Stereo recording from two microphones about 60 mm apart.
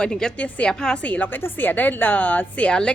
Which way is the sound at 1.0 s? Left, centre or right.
Left.